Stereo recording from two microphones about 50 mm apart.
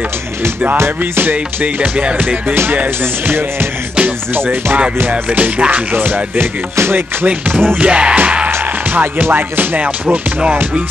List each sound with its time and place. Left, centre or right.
1.2 s music: right
4.0 s music: right
5.9 s music: right
7.8 s music: right
8.5 s music: right
9.8 s music: right